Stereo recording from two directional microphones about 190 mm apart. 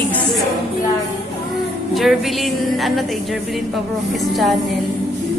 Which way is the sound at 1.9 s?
Centre (ahead or behind).